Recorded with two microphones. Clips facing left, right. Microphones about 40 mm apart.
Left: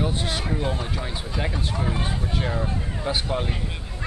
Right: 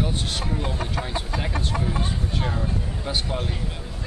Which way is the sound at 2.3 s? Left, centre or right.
Centre.